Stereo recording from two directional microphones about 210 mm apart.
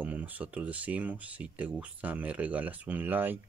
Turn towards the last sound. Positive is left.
turn(degrees=-10)  # may be behind; listen again after turning